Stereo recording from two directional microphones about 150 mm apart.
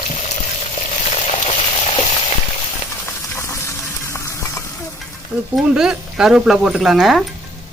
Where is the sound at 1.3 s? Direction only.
40° left (ahead or behind).